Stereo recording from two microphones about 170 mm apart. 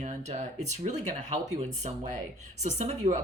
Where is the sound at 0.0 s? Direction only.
40° right (ahead or behind).